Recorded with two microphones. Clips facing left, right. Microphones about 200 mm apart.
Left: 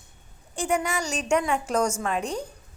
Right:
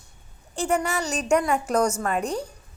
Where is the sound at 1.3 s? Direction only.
5° right (ahead or behind).